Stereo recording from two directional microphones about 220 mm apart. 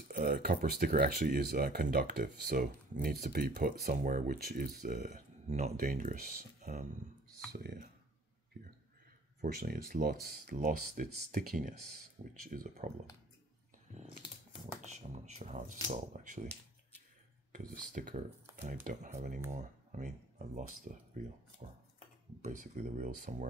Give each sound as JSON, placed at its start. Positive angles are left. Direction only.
{"t": 0.1, "sound": "speech", "side_deg": -40}
{"t": 9.4, "sound": "speech", "side_deg": -40}
{"t": 14.8, "sound": "speech", "side_deg": -30}
{"t": 17.9, "sound": "speech", "side_deg": -35}